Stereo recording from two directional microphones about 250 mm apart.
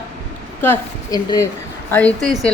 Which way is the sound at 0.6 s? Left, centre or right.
Centre.